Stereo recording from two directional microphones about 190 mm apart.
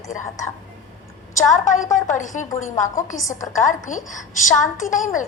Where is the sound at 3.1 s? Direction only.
15° left (ahead or behind).